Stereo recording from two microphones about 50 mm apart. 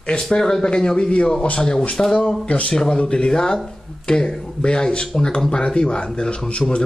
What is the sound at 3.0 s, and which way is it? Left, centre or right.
Speech, left.